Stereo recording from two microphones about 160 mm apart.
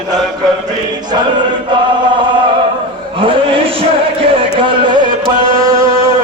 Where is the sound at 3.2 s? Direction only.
35° right (ahead or behind).